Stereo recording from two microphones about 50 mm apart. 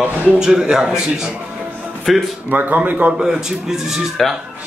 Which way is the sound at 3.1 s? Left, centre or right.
Centre.